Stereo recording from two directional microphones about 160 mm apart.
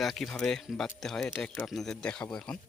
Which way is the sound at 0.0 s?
Centre (ahead or behind).